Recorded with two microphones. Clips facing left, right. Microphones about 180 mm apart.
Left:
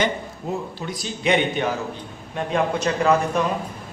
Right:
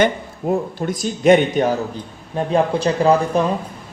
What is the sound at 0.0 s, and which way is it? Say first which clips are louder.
A man's voice: right 6 dB; 50° right (ahead or behind).